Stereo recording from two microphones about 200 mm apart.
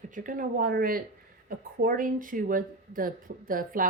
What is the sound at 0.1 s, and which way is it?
Speech, 40° right (ahead or behind).